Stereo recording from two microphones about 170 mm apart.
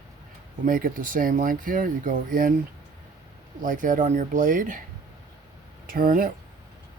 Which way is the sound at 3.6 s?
50° right (ahead or behind).